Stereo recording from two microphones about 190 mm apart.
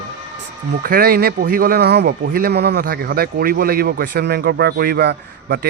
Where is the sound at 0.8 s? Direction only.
50° right (ahead or behind).